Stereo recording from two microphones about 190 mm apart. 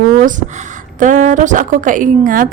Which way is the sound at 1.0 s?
40° right (ahead or behind).